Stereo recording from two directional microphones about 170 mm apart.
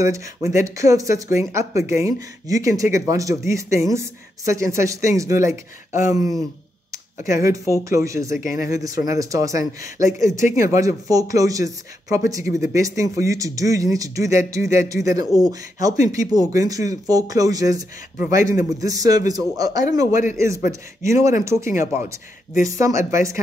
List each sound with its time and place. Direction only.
0.0 s speech: 15° right (ahead or behind)